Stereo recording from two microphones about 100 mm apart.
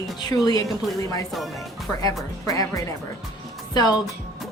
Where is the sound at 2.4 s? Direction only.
35° left (ahead or behind).